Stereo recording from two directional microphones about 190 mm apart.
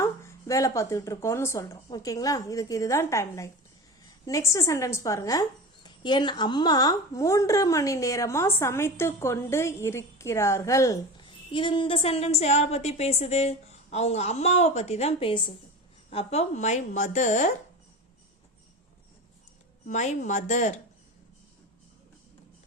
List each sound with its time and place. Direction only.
0.0 s a woman's voice: 15° left (ahead or behind); by 17.5 s 40° left (ahead or behind)
19.9 s a woman's voice: 40° left (ahead or behind)